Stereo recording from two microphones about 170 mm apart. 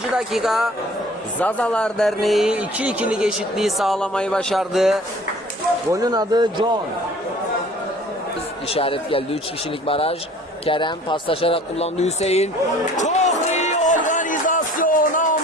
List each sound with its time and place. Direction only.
0.2 s speech: centre (ahead or behind)
5.9 s speech: 20° right (ahead or behind)
8.7 s speech: 35° left (ahead or behind)
13.0 s music: 45° left (ahead or behind)